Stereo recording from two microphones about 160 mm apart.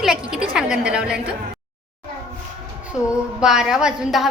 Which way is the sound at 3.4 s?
5° right (ahead or behind).